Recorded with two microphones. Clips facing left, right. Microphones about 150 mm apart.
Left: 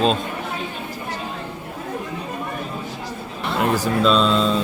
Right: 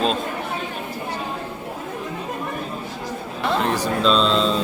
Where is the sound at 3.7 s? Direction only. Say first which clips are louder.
Left 4 dB; 5° left (ahead or behind).